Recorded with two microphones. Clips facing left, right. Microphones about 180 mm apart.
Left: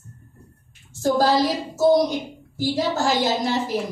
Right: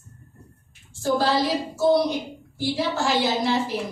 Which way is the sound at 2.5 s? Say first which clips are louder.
Left 3 dB; 45° left (ahead or behind).